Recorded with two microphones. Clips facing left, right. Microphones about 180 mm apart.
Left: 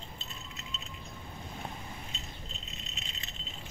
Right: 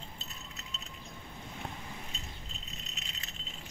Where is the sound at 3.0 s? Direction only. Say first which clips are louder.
Left 2 dB; 30° left (ahead or behind).